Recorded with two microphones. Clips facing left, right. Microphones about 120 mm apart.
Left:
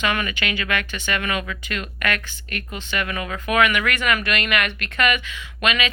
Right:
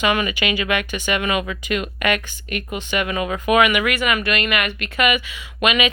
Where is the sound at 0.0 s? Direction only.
15° right (ahead or behind).